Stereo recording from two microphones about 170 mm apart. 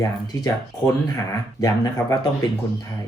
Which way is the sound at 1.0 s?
20° left (ahead or behind).